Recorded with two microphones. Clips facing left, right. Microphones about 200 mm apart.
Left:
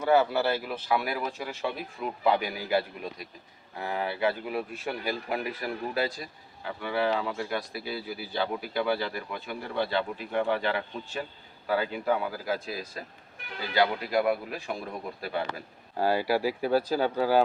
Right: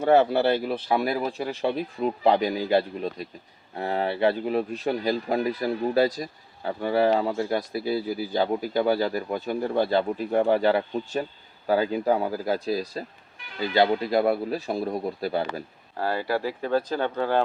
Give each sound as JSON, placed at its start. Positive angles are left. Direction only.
{"t": 0.0, "sound": "speech", "side_deg": -35}
{"t": 16.0, "sound": "speech", "side_deg": 15}